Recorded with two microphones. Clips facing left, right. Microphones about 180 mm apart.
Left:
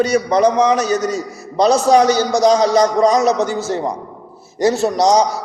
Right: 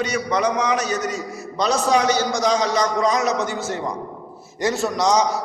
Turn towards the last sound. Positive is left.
turn(degrees=35)  # may be behind; listen again after turning